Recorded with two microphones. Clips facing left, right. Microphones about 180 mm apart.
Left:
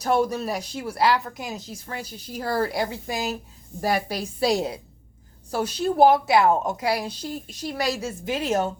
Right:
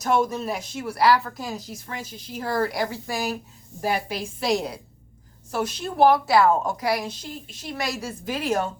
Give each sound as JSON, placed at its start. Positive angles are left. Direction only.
{"t": 0.0, "sound": "speech", "side_deg": 35}
{"t": 3.8, "sound": "a woman's voice", "side_deg": 40}